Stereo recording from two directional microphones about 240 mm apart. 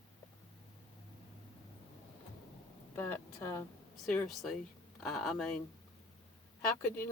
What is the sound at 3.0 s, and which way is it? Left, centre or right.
Speech, centre.